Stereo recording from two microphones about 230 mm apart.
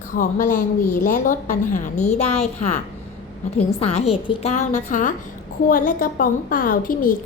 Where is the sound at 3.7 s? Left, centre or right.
Left.